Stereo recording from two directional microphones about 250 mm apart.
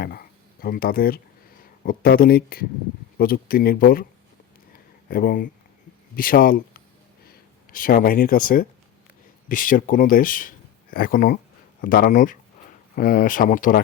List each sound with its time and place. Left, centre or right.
0.0 s speech: left
5.0 s speech: left